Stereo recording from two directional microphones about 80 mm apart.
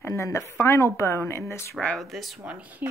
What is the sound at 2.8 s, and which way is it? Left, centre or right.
Speech, right.